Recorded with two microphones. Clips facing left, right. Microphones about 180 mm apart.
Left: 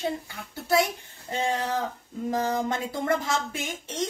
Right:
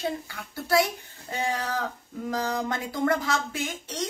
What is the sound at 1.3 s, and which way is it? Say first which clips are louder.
A woman's voice: left 2 dB; 25° left (ahead or behind).